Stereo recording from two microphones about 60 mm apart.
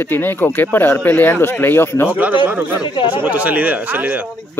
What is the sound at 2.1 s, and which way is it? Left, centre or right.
Speech, right.